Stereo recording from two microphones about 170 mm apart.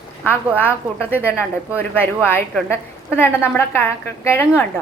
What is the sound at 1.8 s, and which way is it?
A woman's voice, 10° left (ahead or behind).